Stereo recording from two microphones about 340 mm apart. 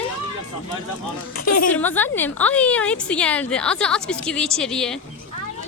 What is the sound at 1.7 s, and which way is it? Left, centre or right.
A woman's voice, centre.